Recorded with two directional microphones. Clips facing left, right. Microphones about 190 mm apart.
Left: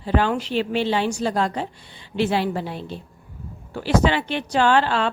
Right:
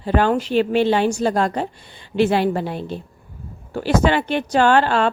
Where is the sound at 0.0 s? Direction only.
50° right (ahead or behind).